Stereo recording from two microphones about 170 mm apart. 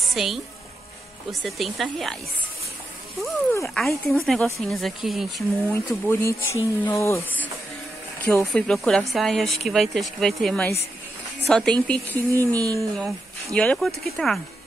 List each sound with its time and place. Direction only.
0.1 s a woman's voice: centre (ahead or behind)
1.4 s speech: centre (ahead or behind)
3.7 s speech: 5° left (ahead or behind)
5.7 s speech: 15° left (ahead or behind)
8.3 s speech: 5° left (ahead or behind)
12.3 s speech: 20° right (ahead or behind)
12.9 s speech: 5° left (ahead or behind)